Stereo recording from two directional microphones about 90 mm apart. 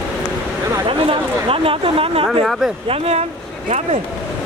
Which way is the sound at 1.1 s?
90° right.